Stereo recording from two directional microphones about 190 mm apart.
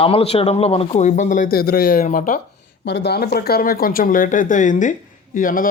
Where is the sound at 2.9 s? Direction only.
65° left (ahead or behind); by 5.7 s 45° left (ahead or behind).